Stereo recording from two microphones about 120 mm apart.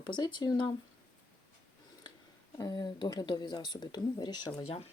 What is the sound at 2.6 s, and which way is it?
Speech, 35° left (ahead or behind).